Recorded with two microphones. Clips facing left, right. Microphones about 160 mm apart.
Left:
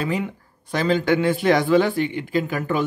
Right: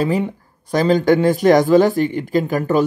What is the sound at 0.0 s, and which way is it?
Speech, 35° right (ahead or behind).